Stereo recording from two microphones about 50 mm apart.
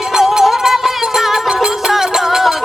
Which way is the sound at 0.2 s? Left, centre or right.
Centre.